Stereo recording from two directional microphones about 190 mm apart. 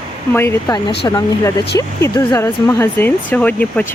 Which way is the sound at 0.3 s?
15° left (ahead or behind).